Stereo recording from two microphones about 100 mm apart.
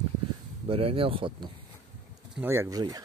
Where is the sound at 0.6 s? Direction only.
70° right (ahead or behind).